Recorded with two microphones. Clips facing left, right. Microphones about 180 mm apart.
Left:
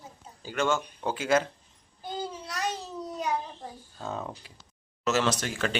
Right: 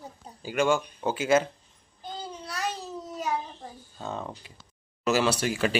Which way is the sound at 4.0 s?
Centre (ahead or behind).